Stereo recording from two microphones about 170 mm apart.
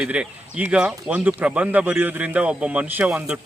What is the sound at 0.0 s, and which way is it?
Speech, 5° right (ahead or behind).